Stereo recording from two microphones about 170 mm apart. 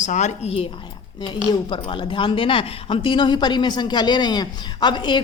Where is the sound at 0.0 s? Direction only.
45° left (ahead or behind).